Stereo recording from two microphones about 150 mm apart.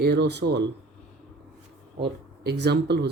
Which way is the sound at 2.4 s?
90° right.